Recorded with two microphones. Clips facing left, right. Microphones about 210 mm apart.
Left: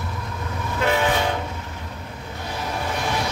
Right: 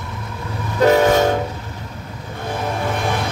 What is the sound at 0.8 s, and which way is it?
Train, 40° right (ahead or behind).